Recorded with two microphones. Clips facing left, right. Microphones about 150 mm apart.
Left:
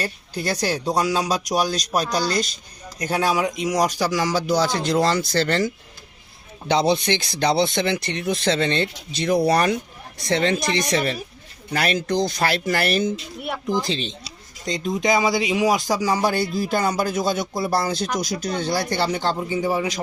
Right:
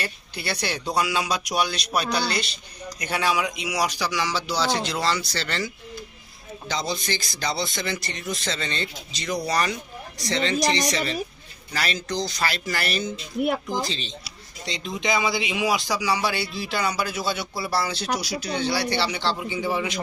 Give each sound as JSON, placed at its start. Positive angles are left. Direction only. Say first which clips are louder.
{"t": 0.0, "sound": "speech", "louder": "left 5 dB", "side_deg": 40}
{"t": 6.7, "sound": "speech", "louder": "left 9 dB", "side_deg": 65}
{"t": 13.4, "sound": "speech", "louder": "right 4 dB", "side_deg": -45}
{"t": 13.8, "sound": "speech", "louder": "left 5 dB", "side_deg": 55}
{"t": 14.6, "sound": "speech", "louder": "left 6 dB", "side_deg": 45}